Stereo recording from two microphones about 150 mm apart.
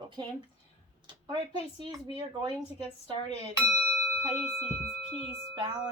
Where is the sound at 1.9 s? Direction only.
30° right (ahead or behind).